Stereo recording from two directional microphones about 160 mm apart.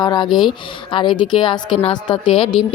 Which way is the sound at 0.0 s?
25° left (ahead or behind).